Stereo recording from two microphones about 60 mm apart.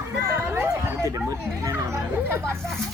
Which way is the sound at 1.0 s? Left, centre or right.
Right.